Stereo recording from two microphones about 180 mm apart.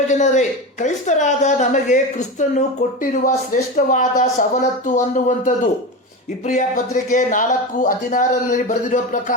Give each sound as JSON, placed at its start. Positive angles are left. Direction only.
{"t": 0.1, "sound": "speech", "side_deg": 40}